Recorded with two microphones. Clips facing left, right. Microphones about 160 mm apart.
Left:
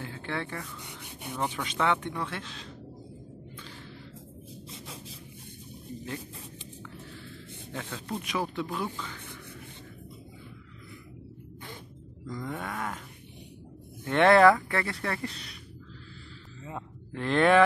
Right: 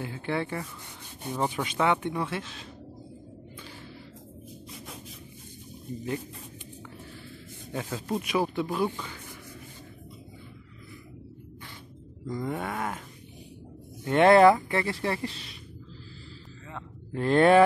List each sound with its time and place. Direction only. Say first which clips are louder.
0.0 s speech: right 4 dB; 15° right (ahead or behind)
7.7 s speech: right 5 dB; 10° right (ahead or behind)
12.3 s speech: right 4 dB; 25° right (ahead or behind)
12.5 s speech: right 3 dB; 10° right (ahead or behind)
14.0 s speech: right 2 dB; 20° right (ahead or behind)
17.1 s speech: right 3 dB; 40° right (ahead or behind)